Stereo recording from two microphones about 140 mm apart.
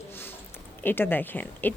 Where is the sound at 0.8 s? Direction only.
15° left (ahead or behind).